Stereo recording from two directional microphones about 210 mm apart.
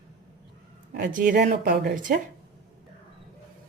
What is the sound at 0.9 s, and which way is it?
Speech, 40° right (ahead or behind).